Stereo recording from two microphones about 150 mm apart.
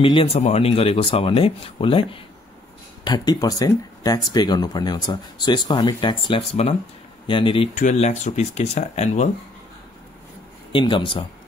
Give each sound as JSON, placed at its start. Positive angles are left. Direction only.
{"t": 0.0, "sound": "speech", "side_deg": 35}
{"t": 7.7, "sound": "speech", "side_deg": 55}
{"t": 10.7, "sound": "speech", "side_deg": 35}